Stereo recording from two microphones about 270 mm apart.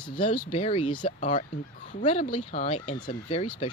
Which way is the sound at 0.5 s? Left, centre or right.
Left.